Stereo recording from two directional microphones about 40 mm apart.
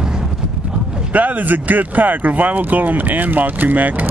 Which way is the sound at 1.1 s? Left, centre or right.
Right.